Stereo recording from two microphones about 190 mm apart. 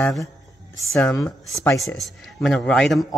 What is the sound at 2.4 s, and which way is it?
Speech, centre (ahead or behind).